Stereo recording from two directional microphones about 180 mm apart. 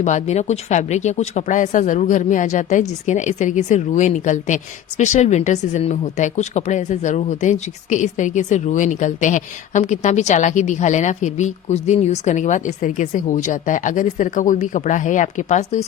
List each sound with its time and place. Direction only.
0.0 s a woman's voice: 40° left (ahead or behind)